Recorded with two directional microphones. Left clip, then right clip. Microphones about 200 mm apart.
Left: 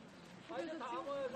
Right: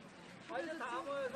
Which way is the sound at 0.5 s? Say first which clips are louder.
Right 2 dB; 60° right (ahead or behind).